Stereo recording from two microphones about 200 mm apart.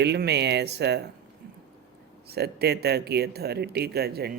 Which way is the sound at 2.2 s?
55° right (ahead or behind).